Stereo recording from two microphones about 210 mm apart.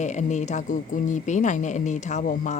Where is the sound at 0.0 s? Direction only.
35° left (ahead or behind).